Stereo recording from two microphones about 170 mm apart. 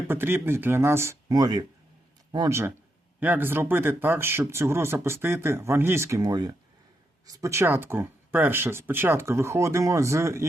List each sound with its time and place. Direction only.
0.1 s speech: 15° right (ahead or behind)